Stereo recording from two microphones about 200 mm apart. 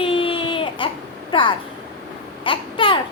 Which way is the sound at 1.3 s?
25° left (ahead or behind).